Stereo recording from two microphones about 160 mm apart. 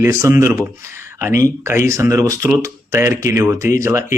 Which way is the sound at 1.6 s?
15° right (ahead or behind).